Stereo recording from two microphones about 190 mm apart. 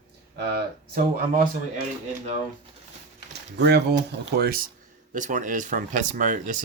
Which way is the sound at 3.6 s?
60° right (ahead or behind).